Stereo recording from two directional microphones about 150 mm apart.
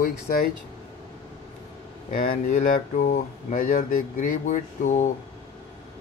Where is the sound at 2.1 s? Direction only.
65° left (ahead or behind).